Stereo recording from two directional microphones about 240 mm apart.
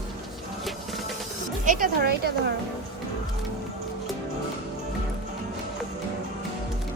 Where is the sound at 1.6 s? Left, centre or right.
Right.